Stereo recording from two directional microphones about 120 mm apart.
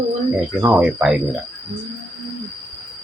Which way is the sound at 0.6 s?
10° right (ahead or behind).